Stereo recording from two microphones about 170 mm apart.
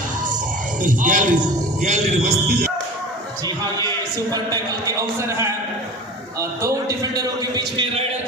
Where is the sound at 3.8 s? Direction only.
25° right (ahead or behind).